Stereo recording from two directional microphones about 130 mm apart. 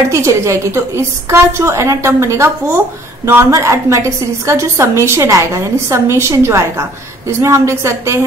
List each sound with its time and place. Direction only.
0.1 s a woman's voice: 20° right (ahead or behind)